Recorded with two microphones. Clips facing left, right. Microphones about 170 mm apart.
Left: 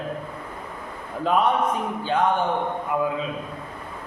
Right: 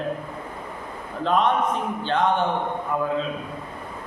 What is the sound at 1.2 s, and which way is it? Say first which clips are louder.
Speech: even; 10° left (ahead or behind).